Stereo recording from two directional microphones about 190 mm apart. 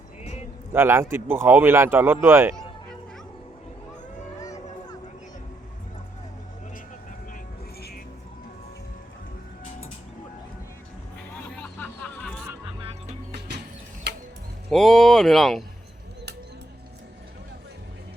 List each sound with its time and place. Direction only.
0.2 s a sound: 35° left (ahead or behind)
0.7 s a man's voice: 10° right (ahead or behind)
11.4 s hubbub: 10° left (ahead or behind)
12.8 s music: 35° right (ahead or behind)
14.7 s speech: centre (ahead or behind)